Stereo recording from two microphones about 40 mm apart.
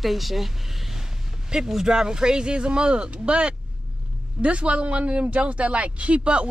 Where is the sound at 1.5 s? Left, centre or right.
Centre.